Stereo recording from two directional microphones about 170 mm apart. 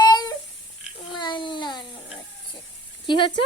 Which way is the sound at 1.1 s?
25° left (ahead or behind).